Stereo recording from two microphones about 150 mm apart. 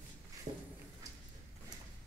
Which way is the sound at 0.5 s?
40° right (ahead or behind).